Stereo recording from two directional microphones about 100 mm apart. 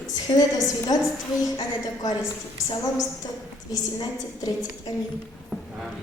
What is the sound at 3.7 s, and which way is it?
Speech, 40° left (ahead or behind).